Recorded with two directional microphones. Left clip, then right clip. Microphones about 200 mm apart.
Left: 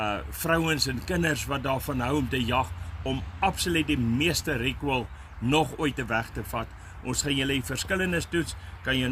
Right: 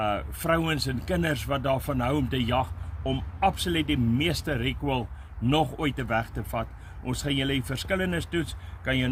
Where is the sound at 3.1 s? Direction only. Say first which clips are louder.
Right 2 dB; 15° right (ahead or behind).